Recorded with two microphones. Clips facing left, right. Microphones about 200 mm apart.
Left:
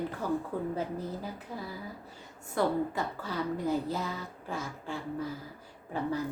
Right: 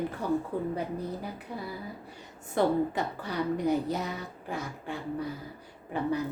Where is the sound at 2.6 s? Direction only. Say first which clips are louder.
Right 3 dB; 20° right (ahead or behind).